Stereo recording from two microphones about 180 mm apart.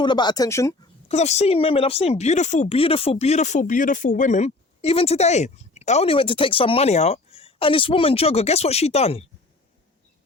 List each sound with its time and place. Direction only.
0.0 s speech: 25° left (ahead or behind)
1.0 s speech: 35° left (ahead or behind)